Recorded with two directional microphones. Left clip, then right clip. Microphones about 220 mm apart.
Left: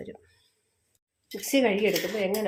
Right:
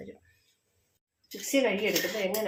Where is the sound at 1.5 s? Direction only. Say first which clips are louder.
Left 3 dB; 50° left (ahead or behind).